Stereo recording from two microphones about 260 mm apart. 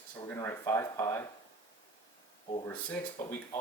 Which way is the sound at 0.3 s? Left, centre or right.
Centre.